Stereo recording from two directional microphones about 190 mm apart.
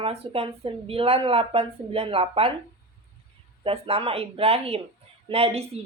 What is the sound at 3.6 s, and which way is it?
A woman's voice, 30° right (ahead or behind).